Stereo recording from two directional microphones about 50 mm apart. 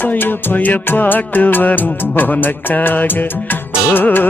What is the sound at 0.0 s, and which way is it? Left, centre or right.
Music, left.